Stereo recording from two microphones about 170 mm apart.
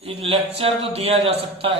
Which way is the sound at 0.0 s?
35° right (ahead or behind).